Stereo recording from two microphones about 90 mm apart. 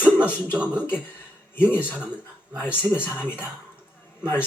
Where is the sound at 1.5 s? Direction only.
20° left (ahead or behind).